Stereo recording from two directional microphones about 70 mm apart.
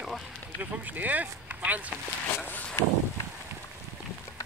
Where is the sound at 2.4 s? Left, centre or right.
Left.